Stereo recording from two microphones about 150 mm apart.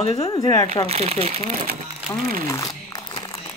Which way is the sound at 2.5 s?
25° left (ahead or behind).